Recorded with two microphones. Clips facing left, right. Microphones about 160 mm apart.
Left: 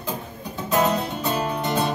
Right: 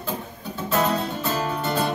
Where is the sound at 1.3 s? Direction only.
20° left (ahead or behind).